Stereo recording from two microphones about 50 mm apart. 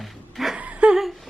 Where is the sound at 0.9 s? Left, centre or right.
Centre.